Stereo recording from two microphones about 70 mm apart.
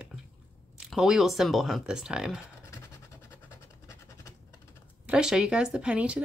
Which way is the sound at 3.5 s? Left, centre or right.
Left.